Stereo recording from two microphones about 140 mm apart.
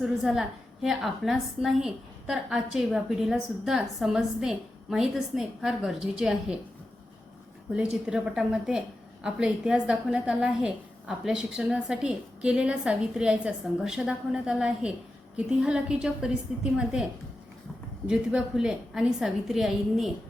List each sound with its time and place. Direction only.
0.0 s a woman's voice: centre (ahead or behind)
7.7 s a woman's voice: 5° right (ahead or behind)
18.1 s a woman's voice: 5° right (ahead or behind)